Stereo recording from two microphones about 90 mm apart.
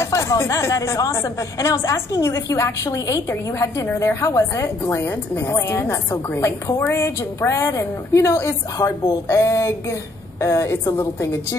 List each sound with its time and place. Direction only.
0.0 s speech: 35° left (ahead or behind)